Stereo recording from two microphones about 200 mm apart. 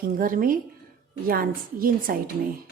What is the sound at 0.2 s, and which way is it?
A woman's voice, 45° right (ahead or behind).